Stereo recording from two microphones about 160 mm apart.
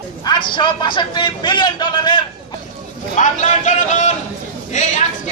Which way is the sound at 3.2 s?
50° left (ahead or behind).